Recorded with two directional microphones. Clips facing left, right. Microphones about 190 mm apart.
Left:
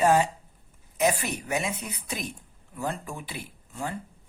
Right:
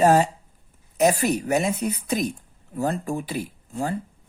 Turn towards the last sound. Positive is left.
turn(degrees=-40)  # may be behind; listen again after turning